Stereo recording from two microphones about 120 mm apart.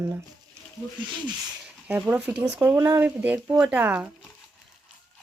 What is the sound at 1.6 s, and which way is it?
Speech, 10° right (ahead or behind).